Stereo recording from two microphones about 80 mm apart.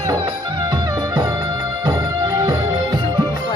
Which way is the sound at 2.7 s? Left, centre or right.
Right.